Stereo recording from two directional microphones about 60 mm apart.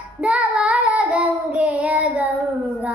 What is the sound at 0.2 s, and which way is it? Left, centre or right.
Child singing, centre.